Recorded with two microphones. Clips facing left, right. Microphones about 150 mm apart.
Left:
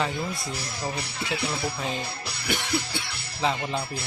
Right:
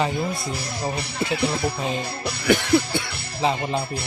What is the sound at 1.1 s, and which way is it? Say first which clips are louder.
Speech: right 9 dB; 50° right (ahead or behind).